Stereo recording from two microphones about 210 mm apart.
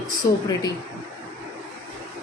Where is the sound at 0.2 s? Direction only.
15° left (ahead or behind).